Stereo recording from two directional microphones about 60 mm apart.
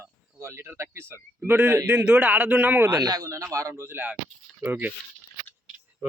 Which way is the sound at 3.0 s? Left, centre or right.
Right.